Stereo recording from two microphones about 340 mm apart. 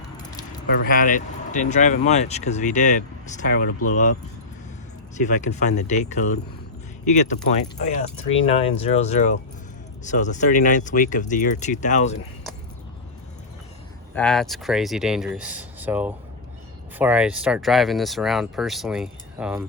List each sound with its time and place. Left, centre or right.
0.7 s speech: left
14.2 s speech: centre